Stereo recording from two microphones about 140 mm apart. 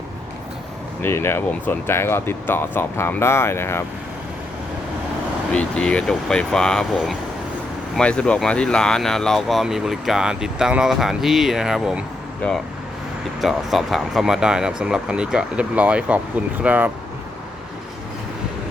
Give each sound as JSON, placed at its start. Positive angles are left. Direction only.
{"t": 1.0, "sound": "speech", "side_deg": 15}
{"t": 5.5, "sound": "speech", "side_deg": 10}
{"t": 12.4, "sound": "speech", "side_deg": 5}